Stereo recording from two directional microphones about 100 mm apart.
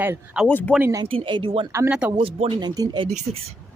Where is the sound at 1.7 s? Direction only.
25° right (ahead or behind).